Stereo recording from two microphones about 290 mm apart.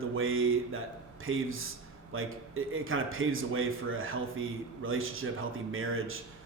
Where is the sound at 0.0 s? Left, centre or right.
Right.